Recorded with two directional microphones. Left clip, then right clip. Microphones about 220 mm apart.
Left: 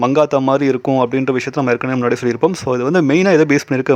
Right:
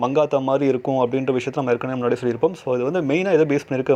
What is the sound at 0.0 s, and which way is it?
Speech, 20° left (ahead or behind).